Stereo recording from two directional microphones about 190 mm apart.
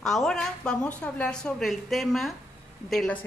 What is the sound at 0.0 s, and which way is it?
A woman's voice, centre (ahead or behind).